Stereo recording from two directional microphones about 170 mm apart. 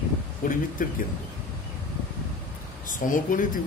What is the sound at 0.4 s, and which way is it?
Speech, 50° left (ahead or behind).